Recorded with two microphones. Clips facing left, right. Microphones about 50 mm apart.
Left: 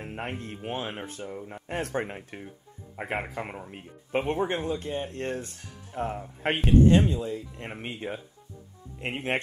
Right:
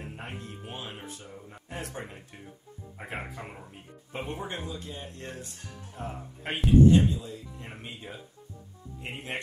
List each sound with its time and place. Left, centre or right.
0.1 s speech: left
1.2 s speech: left
1.7 s speech: left